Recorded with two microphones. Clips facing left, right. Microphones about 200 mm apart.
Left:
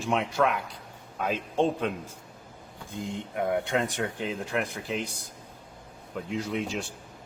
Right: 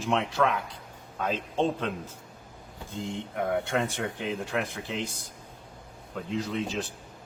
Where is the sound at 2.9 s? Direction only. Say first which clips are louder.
Even; 15° left (ahead or behind).